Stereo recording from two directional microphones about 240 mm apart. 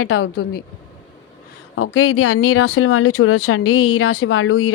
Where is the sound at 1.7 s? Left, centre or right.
Left.